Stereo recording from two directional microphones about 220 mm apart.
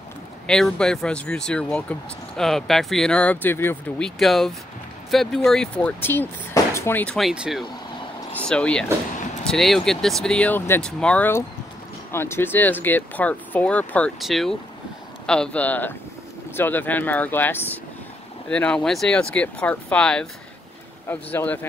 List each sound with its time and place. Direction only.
0.5 s speech: centre (ahead or behind)